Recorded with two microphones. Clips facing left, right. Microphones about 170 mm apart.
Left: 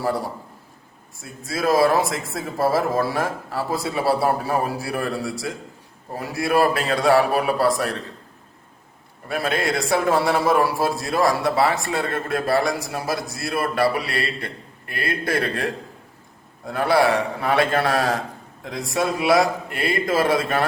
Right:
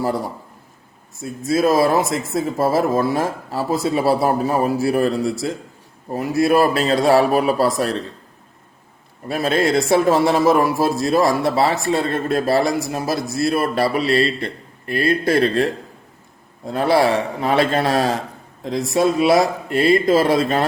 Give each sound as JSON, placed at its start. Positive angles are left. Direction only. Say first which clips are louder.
{"t": 1.2, "sound": "a man's voice", "louder": "right 7 dB", "side_deg": -20}
{"t": 9.3, "sound": "a man's voice", "louder": "right 5 dB", "side_deg": -25}
{"t": 16.6, "sound": "a man's voice", "louder": "right 2 dB", "side_deg": -25}